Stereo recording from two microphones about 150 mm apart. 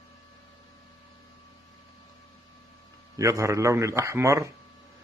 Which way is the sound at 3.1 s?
20° right (ahead or behind).